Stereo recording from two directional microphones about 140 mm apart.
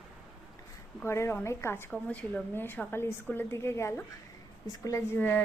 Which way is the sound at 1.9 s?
5° left (ahead or behind).